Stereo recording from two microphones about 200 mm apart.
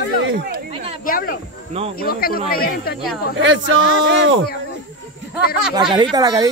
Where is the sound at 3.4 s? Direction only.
65° right (ahead or behind).